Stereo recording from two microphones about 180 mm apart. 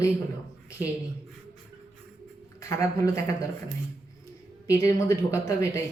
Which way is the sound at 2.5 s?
15° left (ahead or behind).